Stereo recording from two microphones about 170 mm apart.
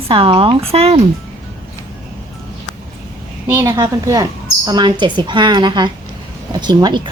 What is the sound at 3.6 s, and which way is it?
Speech, 20° right (ahead or behind).